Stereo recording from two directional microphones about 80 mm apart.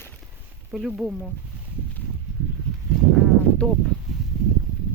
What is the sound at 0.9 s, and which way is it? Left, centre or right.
Speech, centre.